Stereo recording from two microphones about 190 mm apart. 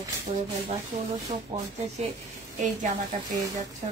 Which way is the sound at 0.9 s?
35° right (ahead or behind).